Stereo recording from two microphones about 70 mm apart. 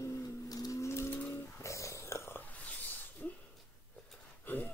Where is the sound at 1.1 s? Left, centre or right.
Left.